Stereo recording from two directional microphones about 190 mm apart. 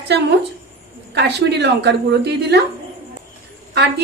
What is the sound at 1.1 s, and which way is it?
A woman's voice, 60° right (ahead or behind).